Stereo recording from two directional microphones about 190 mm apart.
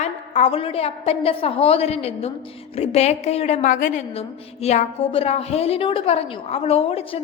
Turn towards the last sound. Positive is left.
turn(degrees=30)  # may be behind; listen again after turning